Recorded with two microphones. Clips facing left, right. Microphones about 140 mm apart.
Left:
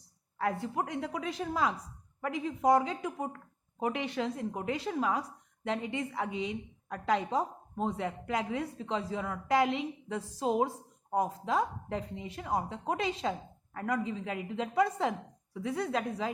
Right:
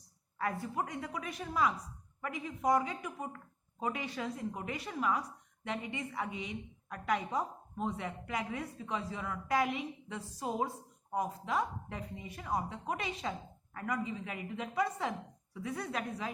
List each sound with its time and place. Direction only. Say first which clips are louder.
0.6 s a woman's voice: left 4 dB; 75° left (ahead or behind)
3.8 s a woman's voice: left 5 dB; 70° left (ahead or behind)
12.9 s a woman's voice: left 6 dB; 90° left